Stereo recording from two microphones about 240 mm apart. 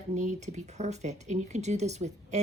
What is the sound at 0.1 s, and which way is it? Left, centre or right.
Speech, right.